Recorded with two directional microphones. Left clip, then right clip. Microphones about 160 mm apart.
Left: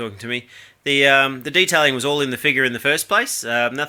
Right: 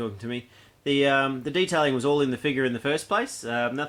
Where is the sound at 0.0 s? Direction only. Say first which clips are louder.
Left 6 dB; 10° left (ahead or behind).